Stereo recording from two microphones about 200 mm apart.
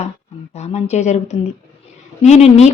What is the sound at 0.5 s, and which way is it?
A woman's voice, 35° left (ahead or behind).